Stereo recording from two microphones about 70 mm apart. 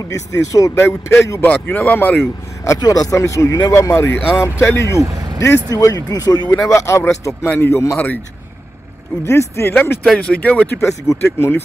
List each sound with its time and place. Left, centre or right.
0.1 s speech: left
1.4 s speech: left
2.8 s speech: left
5.0 s vehicle: right
5.7 s speech: left
6.6 s speech: left
7.4 s speech: left
7.7 s speech: left
9.2 s speech: left
10.0 s speech: centre
11.2 s speech: left